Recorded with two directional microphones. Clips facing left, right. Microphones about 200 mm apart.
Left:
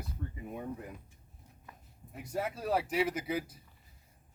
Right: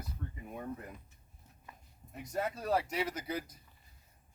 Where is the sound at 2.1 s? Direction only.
5° left (ahead or behind).